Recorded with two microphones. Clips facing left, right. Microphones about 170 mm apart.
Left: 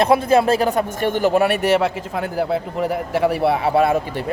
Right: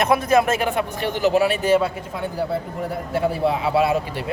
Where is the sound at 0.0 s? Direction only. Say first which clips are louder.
Left 3 dB; 30° left (ahead or behind).